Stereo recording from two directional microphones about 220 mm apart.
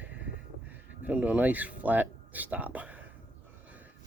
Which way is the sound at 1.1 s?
5° right (ahead or behind).